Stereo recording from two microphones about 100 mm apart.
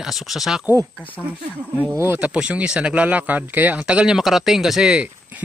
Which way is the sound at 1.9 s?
25° right (ahead or behind).